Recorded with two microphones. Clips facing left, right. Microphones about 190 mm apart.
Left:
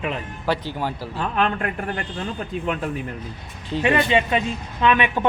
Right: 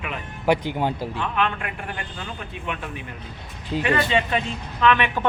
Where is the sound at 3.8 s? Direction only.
20° left (ahead or behind).